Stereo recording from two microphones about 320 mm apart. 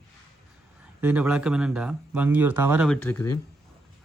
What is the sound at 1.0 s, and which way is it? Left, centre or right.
Speech, centre.